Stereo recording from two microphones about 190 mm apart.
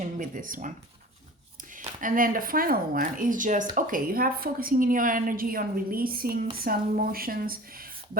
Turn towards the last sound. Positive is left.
turn(degrees=-50)  # may be behind; listen again after turning